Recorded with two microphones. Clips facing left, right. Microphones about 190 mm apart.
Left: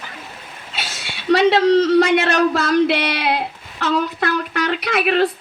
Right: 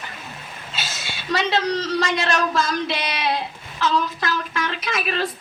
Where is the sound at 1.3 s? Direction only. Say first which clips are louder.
Left 9 dB; 65° left (ahead or behind).